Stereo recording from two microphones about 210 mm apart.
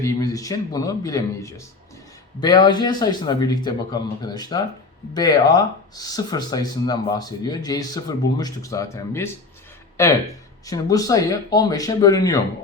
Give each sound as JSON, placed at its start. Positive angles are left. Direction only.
{"t": 0.0, "sound": "a man's voice", "side_deg": 15}